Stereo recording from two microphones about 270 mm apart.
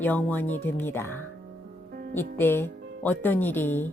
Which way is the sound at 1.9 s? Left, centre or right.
Right.